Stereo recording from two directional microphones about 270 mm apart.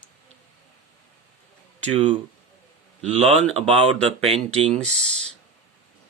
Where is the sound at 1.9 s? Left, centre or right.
Right.